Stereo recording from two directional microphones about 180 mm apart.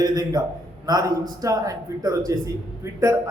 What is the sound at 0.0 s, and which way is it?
A man's voice, 20° right (ahead or behind).